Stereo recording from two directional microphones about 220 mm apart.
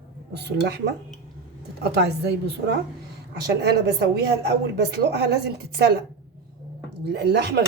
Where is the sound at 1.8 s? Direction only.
50° right (ahead or behind).